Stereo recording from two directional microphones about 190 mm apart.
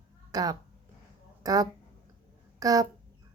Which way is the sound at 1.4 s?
20° right (ahead or behind).